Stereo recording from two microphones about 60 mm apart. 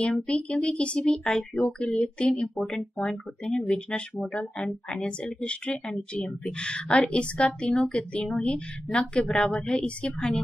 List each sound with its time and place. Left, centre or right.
0.3 s speech: centre
1.8 s speech: centre
2.2 s speech: centre